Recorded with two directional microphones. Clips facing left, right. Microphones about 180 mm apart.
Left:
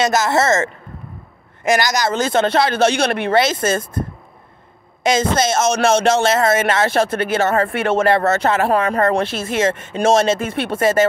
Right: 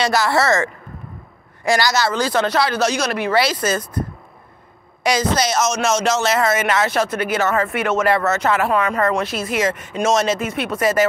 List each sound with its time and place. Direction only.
0.0 s speech: 20° left (ahead or behind)
2.8 s speech: 55° left (ahead or behind)
3.3 s speech: 25° left (ahead or behind)
5.6 s speech: 55° left (ahead or behind)
6.2 s speech: 25° left (ahead or behind)